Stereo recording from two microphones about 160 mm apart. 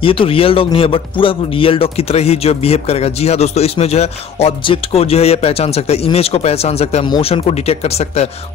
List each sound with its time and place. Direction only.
0.0 s speech: 35° left (ahead or behind)